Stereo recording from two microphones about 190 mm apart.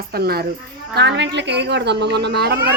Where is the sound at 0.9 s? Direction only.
65° right (ahead or behind).